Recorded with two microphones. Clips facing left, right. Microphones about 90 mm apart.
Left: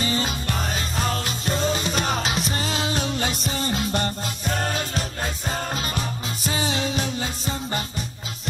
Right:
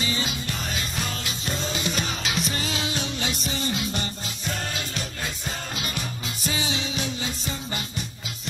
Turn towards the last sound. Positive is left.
turn(degrees=40)  # may be behind; listen again after turning